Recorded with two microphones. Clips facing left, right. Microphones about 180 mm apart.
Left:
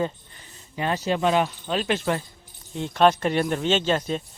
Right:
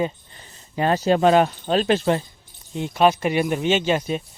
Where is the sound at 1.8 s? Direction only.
25° right (ahead or behind).